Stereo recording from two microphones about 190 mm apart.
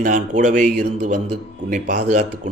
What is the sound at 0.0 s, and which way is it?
Speech, 40° right (ahead or behind).